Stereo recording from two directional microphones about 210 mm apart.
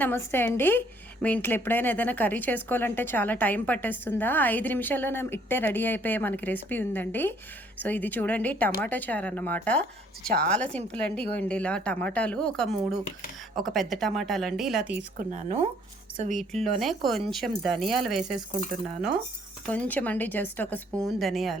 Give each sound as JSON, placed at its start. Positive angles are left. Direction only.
{"t": 0.0, "sound": "a woman's voice", "side_deg": 10}
{"t": 10.8, "sound": "speech", "side_deg": 5}
{"t": 15.2, "sound": "speech", "side_deg": -35}
{"t": 16.4, "sound": "speech", "side_deg": 0}
{"t": 19.7, "sound": "a woman's voice", "side_deg": 5}